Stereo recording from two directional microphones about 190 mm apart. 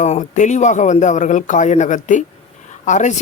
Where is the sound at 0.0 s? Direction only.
40° left (ahead or behind).